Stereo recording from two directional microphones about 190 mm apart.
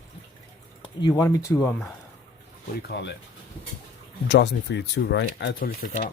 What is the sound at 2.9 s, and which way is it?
Speech, 65° left (ahead or behind).